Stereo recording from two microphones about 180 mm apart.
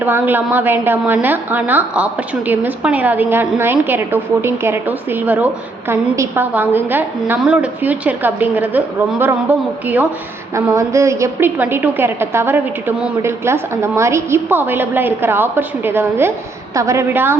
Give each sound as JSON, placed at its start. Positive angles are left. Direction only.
{"t": 0.0, "sound": "a woman's voice", "side_deg": -10}